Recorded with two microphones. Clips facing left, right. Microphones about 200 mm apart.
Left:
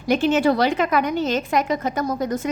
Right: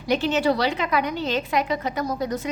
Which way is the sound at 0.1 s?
50° left (ahead or behind).